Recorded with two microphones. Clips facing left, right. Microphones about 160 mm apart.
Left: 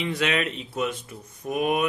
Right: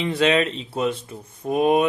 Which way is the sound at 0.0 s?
30° right (ahead or behind).